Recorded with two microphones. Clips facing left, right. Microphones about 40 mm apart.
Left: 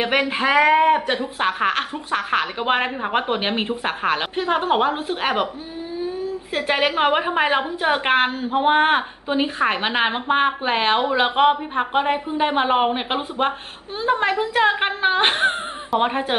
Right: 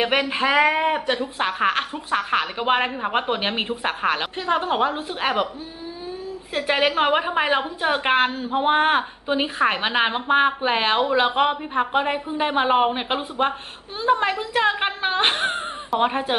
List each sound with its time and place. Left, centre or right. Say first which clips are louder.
0.2 s a woman's voice: left 1 dB; centre
4.4 s a woman's voice: left 3 dB; centre
6.5 s a woman's voice: even; centre
9.3 s a woman's voice: left 1 dB; centre